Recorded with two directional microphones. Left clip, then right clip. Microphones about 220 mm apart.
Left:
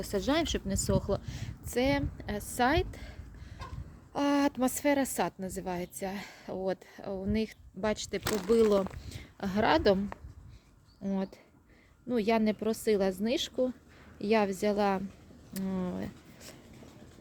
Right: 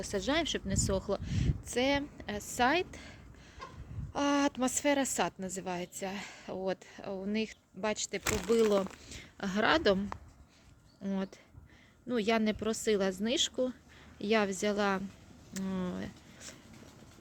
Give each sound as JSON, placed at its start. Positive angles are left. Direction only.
{"t": 0.0, "sound": "a woman's voice", "side_deg": 10}
{"t": 3.6, "sound": "a sound", "side_deg": 60}
{"t": 4.1, "sound": "a woman's voice", "side_deg": 5}
{"t": 8.2, "sound": "speech", "side_deg": -10}
{"t": 9.0, "sound": "a woman's voice", "side_deg": 5}
{"t": 11.0, "sound": "speech", "side_deg": 5}